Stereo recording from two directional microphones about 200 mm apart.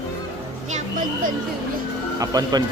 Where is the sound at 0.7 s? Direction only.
40° right (ahead or behind).